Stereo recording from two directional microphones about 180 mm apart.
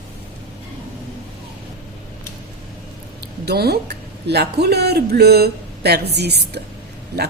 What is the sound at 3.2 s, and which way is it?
Speech, 65° right (ahead or behind).